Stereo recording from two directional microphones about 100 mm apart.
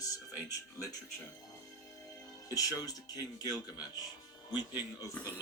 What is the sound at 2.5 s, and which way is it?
Speech, 35° left (ahead or behind).